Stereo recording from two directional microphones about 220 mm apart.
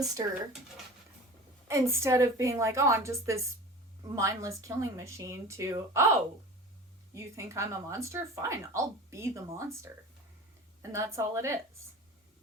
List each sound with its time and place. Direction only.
0.0 s speech: 15° right (ahead or behind)
1.6 s speech: 15° right (ahead or behind)
10.9 s speech: 15° right (ahead or behind)